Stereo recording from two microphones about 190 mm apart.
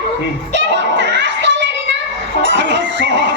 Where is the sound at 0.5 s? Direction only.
70° right (ahead or behind).